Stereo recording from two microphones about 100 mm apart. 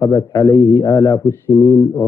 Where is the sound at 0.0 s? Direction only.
35° left (ahead or behind).